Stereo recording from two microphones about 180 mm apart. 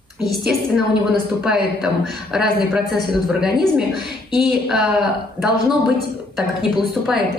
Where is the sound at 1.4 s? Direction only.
5° right (ahead or behind).